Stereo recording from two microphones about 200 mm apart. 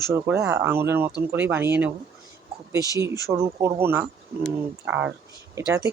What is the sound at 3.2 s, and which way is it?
Speech, 15° right (ahead or behind).